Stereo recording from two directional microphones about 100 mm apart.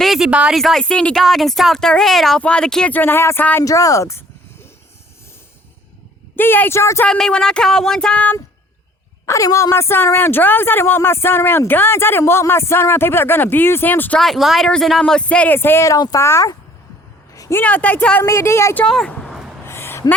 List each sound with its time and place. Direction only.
0.0 s a sound: 5° right (ahead or behind)
0.5 s speech: centre (ahead or behind)
2.9 s speech: 20° left (ahead or behind)
3.6 s speech: 35° left (ahead or behind)
6.3 s speech: 20° left (ahead or behind)
7.0 s speech: 10° left (ahead or behind)
9.2 s speech: 30° left (ahead or behind)
14.2 s speech: centre (ahead or behind); by 16.0 s 25° left (ahead or behind)
16.0 s speech: 40° left (ahead or behind)
17.5 s speech: 15° left (ahead or behind)
18.2 s speech: 25° left (ahead or behind)
18.9 s speech: 5° left (ahead or behind)
19.6 s a sound: 25° left (ahead or behind)